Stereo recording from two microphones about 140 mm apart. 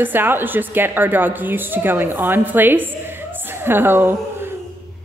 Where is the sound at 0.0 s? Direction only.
15° right (ahead or behind).